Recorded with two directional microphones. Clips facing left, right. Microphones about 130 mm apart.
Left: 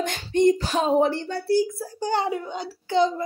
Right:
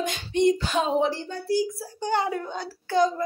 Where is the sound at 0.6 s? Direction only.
35° left (ahead or behind).